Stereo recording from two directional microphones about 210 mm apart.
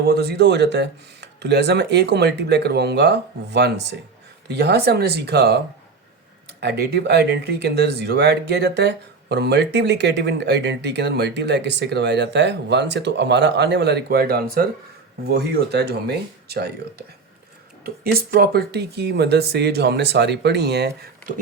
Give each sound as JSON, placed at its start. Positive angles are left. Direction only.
{"t": 0.1, "sound": "speech", "side_deg": -50}
{"t": 17.8, "sound": "speech", "side_deg": -45}